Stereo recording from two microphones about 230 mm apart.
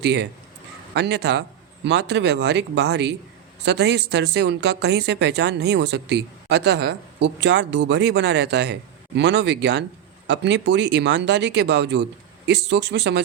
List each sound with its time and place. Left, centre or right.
0.0 s a woman's voice: right